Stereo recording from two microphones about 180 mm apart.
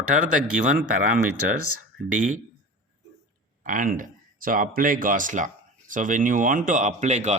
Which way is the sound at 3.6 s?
45° right (ahead or behind).